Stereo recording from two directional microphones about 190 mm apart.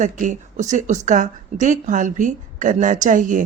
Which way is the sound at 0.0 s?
40° right (ahead or behind).